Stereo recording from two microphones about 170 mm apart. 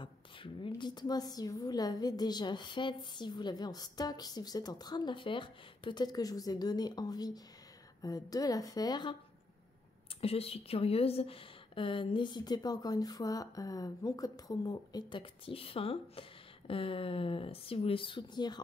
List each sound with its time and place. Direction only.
0.0 s a sound: 30° left (ahead or behind)
0.7 s a woman's voice: 25° left (ahead or behind)
10.2 s a woman's voice: 35° left (ahead or behind)